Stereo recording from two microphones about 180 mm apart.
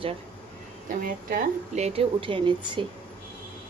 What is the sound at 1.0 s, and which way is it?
A woman's voice, 45° right (ahead or behind).